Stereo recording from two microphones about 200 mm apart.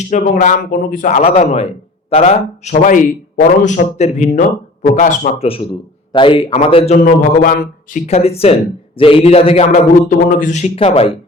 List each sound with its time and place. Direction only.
0.1 s a man's voice: 40° left (ahead or behind)
10.1 s a man's voice: 40° left (ahead or behind)